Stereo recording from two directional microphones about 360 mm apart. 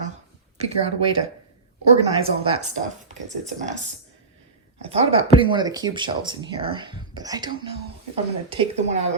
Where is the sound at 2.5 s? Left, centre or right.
Centre.